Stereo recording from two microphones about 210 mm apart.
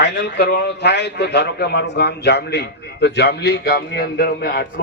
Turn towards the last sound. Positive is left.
turn(degrees=50)  # may be behind; listen again after turning